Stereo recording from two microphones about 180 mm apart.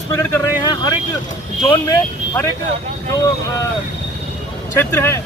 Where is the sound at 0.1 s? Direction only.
15° left (ahead or behind).